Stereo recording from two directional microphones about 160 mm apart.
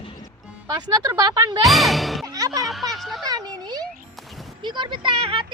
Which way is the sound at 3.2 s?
25° right (ahead or behind).